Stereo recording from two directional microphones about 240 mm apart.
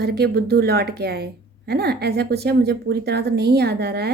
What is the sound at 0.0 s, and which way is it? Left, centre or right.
A woman's voice, right.